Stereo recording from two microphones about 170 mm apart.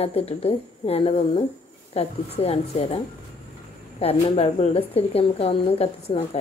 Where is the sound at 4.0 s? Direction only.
35° left (ahead or behind).